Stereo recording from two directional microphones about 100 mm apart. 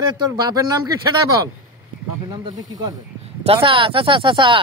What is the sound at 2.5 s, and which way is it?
Speech, 40° right (ahead or behind).